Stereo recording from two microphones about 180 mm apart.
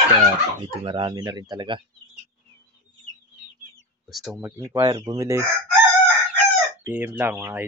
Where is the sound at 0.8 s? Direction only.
25° right (ahead or behind).